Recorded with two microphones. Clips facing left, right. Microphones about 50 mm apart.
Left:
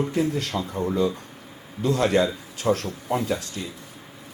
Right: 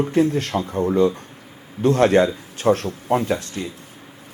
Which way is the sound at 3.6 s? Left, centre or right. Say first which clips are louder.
Right 5 dB; right.